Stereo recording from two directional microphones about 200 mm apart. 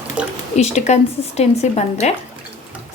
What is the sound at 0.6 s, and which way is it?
Speech, 35° left (ahead or behind).